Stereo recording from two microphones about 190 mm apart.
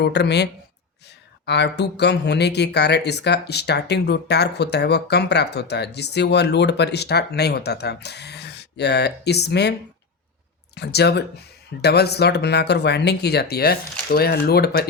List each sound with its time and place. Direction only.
0.0 s speech: 65° left (ahead or behind)
1.5 s speech: 60° left (ahead or behind)
10.8 s speech: 60° left (ahead or behind)